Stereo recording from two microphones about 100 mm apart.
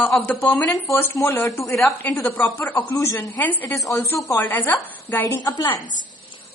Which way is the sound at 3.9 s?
35° left (ahead or behind).